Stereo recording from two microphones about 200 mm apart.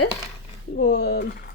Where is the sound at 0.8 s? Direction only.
55° left (ahead or behind).